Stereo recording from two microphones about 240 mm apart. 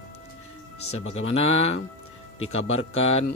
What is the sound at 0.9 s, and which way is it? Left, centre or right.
Speech, left.